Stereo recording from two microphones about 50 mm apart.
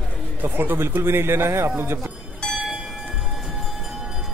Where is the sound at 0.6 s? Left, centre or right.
Right.